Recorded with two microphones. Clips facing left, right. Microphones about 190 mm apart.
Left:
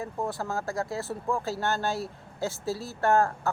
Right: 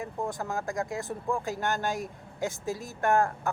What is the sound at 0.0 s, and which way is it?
Speech, 15° right (ahead or behind).